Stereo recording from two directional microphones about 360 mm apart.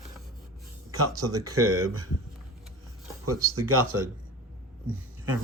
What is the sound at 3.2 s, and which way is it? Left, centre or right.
Speech, right.